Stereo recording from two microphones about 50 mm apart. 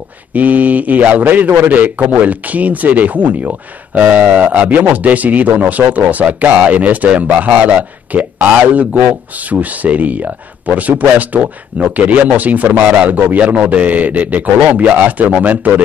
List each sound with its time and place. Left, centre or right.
0.3 s a man's voice: right